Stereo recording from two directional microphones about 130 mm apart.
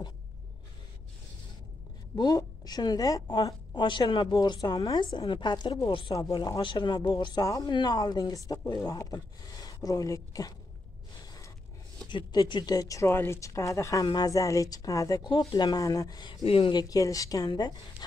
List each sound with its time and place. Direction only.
2.1 s a woman's voice: 30° left (ahead or behind)
5.9 s a woman's voice: 40° left (ahead or behind)
6.1 s a woman's voice: 30° left (ahead or behind)
12.1 s speech: 35° left (ahead or behind)
16.4 s speech: 45° left (ahead or behind)
16.7 s speech: 30° left (ahead or behind)